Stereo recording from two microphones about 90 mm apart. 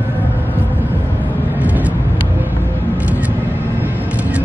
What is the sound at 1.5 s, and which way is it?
Vehicle, 15° right (ahead or behind).